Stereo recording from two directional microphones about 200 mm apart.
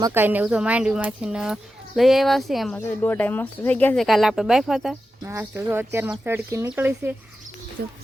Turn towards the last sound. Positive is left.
turn(degrees=-50)  # may be behind; listen again after turning